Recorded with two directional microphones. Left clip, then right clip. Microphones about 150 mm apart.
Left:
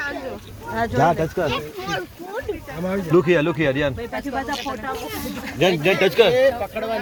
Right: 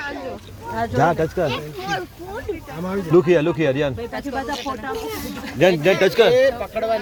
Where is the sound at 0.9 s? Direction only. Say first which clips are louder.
Right 1 dB; 25° right (ahead or behind).